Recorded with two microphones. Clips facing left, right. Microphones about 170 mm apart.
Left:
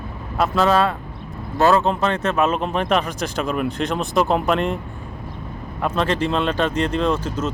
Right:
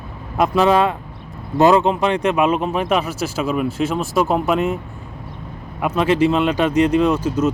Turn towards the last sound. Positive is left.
turn(degrees=-10)  # may be behind; listen again after turning